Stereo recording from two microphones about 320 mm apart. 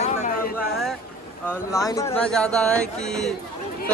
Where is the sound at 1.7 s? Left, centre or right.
Centre.